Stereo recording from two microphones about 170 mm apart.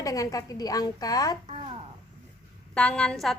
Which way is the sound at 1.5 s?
35° right (ahead or behind).